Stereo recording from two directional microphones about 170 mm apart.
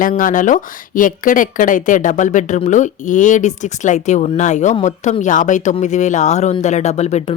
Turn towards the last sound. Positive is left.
turn(degrees=40)  # may be behind; listen again after turning